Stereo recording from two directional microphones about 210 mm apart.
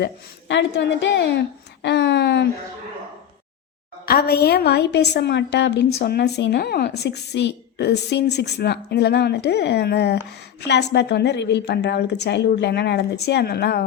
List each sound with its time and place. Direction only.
0.0 s a woman's voice: 55° left (ahead or behind)
4.0 s a woman's voice: 45° left (ahead or behind)